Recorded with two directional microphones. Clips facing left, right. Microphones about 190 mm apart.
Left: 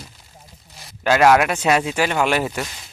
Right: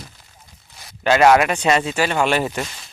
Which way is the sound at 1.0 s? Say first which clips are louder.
Right 1 dB; centre (ahead or behind).